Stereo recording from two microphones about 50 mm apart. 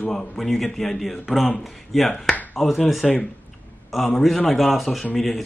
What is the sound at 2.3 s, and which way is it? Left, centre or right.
Finger snapping, left.